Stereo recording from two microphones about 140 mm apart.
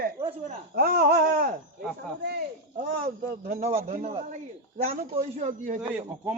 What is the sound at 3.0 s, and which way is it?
Speech, 60° right (ahead or behind).